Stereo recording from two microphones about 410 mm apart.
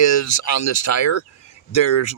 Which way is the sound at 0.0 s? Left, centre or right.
Left.